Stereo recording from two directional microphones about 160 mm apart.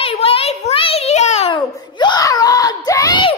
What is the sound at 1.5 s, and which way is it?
Speech, 25° left (ahead or behind).